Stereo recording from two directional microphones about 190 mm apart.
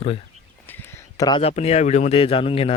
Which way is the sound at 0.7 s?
15° left (ahead or behind).